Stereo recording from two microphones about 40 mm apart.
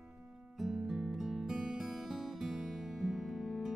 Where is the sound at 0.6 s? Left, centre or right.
Centre.